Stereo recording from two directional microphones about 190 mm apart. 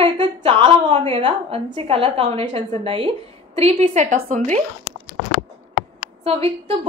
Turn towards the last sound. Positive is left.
turn(degrees=-30)  # may be behind; listen again after turning